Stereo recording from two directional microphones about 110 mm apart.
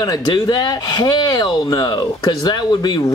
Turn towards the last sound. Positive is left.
turn(degrees=40)  # may be behind; listen again after turning